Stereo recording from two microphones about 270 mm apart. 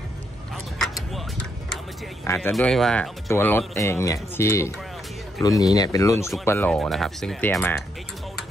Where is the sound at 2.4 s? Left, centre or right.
Centre.